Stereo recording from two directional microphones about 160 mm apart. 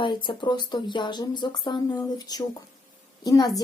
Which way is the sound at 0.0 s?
30° left (ahead or behind).